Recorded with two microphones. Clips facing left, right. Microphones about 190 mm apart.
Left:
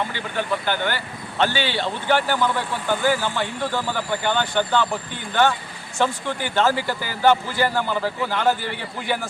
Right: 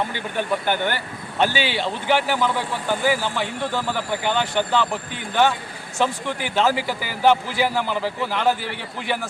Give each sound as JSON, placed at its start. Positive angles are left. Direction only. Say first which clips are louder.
{"t": 0.3, "sound": "a man's voice", "louder": "right 1 dB", "side_deg": -15}